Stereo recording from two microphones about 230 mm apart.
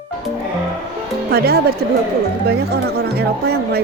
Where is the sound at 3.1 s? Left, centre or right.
Right.